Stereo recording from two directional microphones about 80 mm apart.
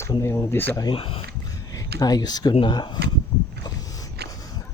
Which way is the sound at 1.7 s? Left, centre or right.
Left.